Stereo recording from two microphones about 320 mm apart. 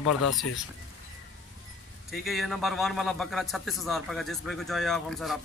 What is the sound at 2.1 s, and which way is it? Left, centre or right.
A man's voice, centre.